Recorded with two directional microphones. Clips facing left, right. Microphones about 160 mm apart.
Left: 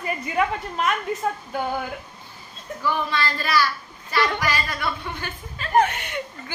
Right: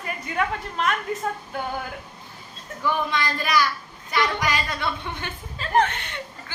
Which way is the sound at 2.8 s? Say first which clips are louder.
Even; 15° right (ahead or behind).